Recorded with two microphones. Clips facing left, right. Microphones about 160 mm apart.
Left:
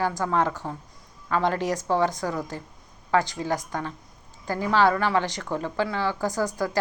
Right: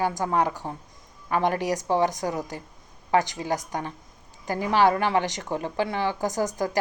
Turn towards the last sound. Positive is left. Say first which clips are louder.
# even
turn(degrees=-15)  # may be behind; listen again after turning